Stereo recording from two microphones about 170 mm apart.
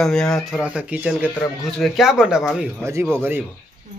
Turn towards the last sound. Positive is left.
turn(degrees=-10)  # may be behind; listen again after turning